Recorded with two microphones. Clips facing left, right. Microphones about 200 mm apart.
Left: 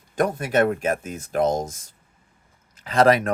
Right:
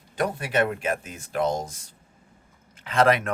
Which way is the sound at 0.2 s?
45° left (ahead or behind).